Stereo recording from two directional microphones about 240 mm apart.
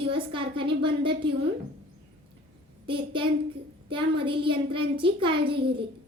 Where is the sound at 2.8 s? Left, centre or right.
Right.